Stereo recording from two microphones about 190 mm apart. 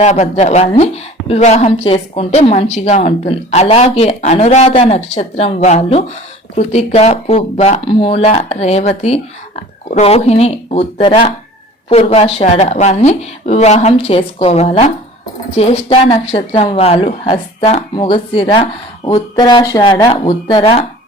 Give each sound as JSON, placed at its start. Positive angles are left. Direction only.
{"t": 0.0, "sound": "a woman's voice", "side_deg": 35}